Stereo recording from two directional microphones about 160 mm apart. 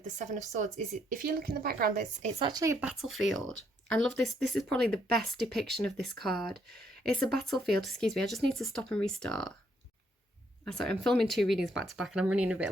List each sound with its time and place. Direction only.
0.0 s speech: 50° right (ahead or behind); by 2.0 s 65° right (ahead or behind)
2.5 s speech: 20° right (ahead or behind)
2.8 s speech: centre (ahead or behind)
10.7 s speech: 5° left (ahead or behind)